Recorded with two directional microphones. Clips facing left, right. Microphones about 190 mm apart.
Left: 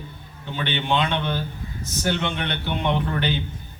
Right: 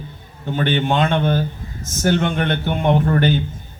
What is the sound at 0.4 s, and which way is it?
A man's voice, 45° right (ahead or behind).